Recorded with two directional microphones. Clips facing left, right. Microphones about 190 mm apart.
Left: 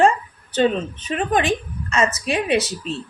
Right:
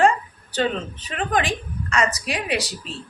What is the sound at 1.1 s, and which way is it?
A woman's voice, 25° left (ahead or behind).